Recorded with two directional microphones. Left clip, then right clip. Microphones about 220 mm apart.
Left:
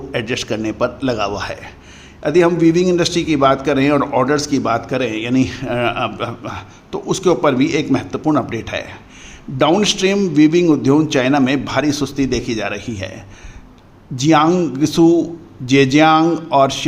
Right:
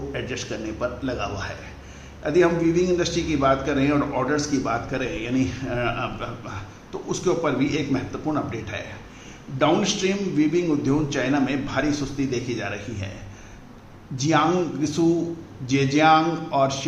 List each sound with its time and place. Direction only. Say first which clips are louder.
0.1 s a man's voice: left 13 dB; 45° left (ahead or behind)
14.2 s a man's voice: left 8 dB; 45° left (ahead or behind)